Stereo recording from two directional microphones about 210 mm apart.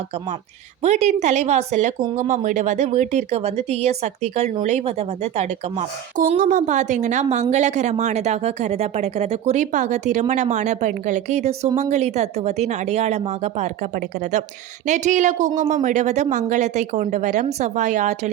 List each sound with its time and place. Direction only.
0.8 s speech: 30° right (ahead or behind)